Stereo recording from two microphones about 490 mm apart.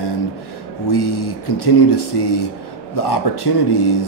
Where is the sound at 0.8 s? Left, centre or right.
Left.